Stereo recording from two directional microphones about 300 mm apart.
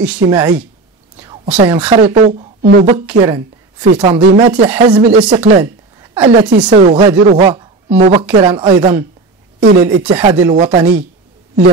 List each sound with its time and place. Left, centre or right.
0.0 s a woman's voice: centre
1.2 s whispering: centre
1.6 s speech: centre
3.1 s a woman's voice: centre
5.6 s a sound: centre
6.7 s a woman's voice: right
9.6 s speech: right
10.0 s a woman's voice: centre
10.5 s speech: right